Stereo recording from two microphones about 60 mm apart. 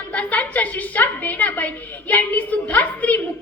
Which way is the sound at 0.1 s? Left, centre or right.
Left.